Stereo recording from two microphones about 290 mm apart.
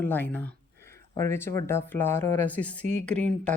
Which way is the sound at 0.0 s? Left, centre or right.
Centre.